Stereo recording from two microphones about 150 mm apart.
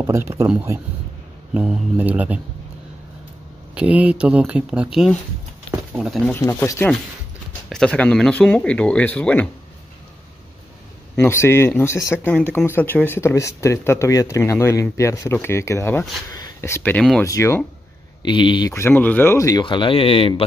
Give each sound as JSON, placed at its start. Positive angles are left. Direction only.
{"t": 0.0, "sound": "speech", "side_deg": -15}
{"t": 1.5, "sound": "speech", "side_deg": -10}
{"t": 3.7, "sound": "speech", "side_deg": -10}
{"t": 6.2, "sound": "speech", "side_deg": 15}
{"t": 7.7, "sound": "speech", "side_deg": 5}
{"t": 11.1, "sound": "speech", "side_deg": 20}
{"t": 17.2, "sound": "speech", "side_deg": 20}
{"t": 18.2, "sound": "speech", "side_deg": 30}
{"t": 18.7, "sound": "speech", "side_deg": 15}
{"t": 19.6, "sound": "speech", "side_deg": 35}